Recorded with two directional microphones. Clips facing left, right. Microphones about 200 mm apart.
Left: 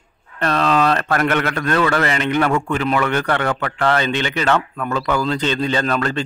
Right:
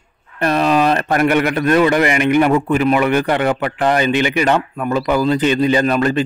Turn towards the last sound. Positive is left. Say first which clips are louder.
# right 5 dB
turn(degrees=-15)  # may be behind; listen again after turning